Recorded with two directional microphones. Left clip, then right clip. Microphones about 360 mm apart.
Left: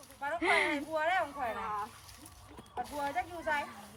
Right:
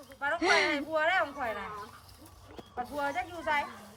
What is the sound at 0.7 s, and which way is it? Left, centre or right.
Speech, right.